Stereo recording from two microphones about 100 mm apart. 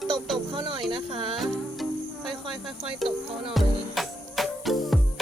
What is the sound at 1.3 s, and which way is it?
Speech, centre (ahead or behind).